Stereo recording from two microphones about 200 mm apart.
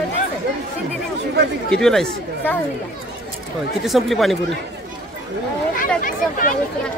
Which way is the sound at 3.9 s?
Centre (ahead or behind).